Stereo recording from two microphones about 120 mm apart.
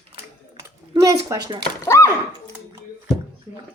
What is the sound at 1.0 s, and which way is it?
Speech, 30° right (ahead or behind).